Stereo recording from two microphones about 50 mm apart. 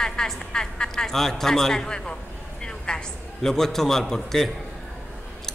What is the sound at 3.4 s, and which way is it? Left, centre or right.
A woman's voice, centre.